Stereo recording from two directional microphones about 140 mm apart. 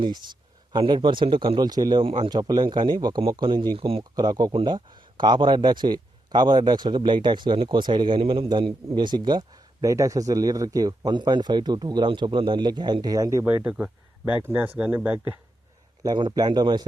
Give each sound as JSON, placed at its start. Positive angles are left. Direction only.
{"t": 0.0, "sound": "speech", "side_deg": -30}
{"t": 4.1, "sound": "speech", "side_deg": -30}
{"t": 13.4, "sound": "speech", "side_deg": -10}
{"t": 16.0, "sound": "speech", "side_deg": -30}